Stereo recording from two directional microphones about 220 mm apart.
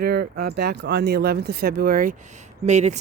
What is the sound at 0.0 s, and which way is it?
Speech, 45° right (ahead or behind).